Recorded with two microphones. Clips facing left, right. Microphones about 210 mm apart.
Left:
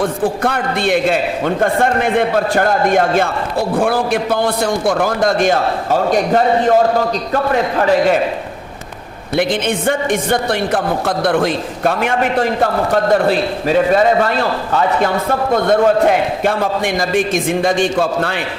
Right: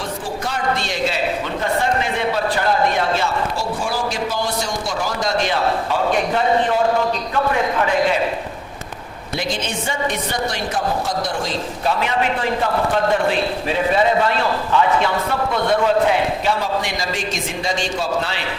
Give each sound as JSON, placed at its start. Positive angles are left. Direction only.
{"t": 0.0, "sound": "a woman's voice", "side_deg": 55}
{"t": 7.8, "sound": "a man's voice", "side_deg": 40}
{"t": 9.4, "sound": "a woman's voice", "side_deg": 55}